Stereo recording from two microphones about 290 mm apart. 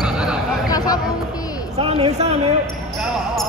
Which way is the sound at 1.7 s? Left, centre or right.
Right.